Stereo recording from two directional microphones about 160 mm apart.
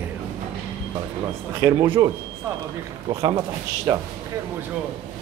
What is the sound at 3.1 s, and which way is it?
Speech, 30° right (ahead or behind).